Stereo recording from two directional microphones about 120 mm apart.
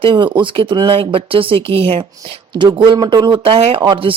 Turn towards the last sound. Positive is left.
turn(degrees=-45)  # may be behind; listen again after turning